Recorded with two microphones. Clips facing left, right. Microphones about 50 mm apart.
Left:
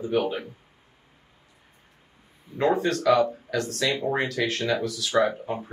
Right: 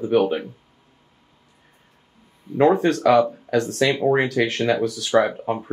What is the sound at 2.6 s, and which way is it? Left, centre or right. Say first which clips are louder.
Speech: right 6 dB; right.